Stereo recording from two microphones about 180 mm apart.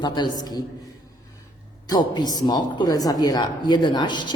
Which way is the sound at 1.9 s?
25° left (ahead or behind).